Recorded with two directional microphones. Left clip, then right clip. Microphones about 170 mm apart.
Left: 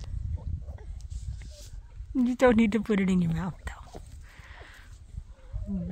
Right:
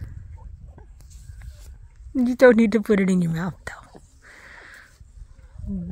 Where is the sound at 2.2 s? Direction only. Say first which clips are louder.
Right 8 dB; 30° right (ahead or behind).